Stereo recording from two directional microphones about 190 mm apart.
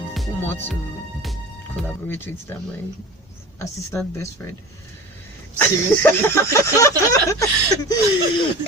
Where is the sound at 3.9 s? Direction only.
15° left (ahead or behind).